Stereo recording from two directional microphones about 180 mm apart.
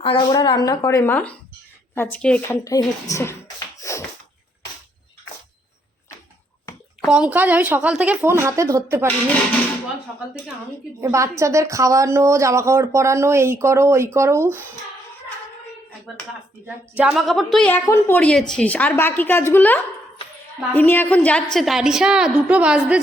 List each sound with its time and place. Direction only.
0.0 s a woman's voice: 25° left (ahead or behind); by 2.6 s 5° left (ahead or behind)
2.6 s a woman's voice: 20° left (ahead or behind)
3.8 s a sound: 15° left (ahead or behind)
7.0 s speech: 5° right (ahead or behind)
11.0 s speech: 15° right (ahead or behind)
16.6 s a woman's voice: 5° right (ahead or behind)